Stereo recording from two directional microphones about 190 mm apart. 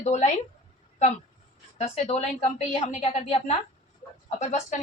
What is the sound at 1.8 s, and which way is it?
A woman's voice, 30° left (ahead or behind).